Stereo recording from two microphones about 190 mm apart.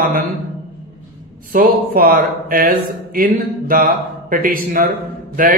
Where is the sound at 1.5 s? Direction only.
50° right (ahead or behind).